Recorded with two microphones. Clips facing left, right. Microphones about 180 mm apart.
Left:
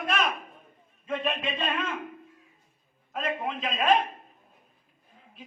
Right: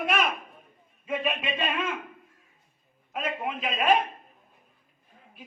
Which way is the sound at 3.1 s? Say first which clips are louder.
Even; 5° right (ahead or behind).